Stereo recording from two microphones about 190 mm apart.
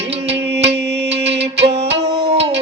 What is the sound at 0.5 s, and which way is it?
Music, 60° right (ahead or behind).